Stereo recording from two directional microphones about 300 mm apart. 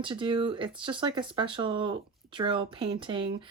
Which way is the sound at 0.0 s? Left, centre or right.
Centre.